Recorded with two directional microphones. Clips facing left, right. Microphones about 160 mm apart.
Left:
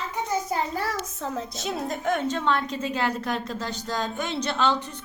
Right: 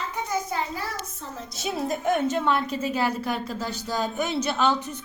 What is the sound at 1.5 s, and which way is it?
A woman's voice, 5° right (ahead or behind).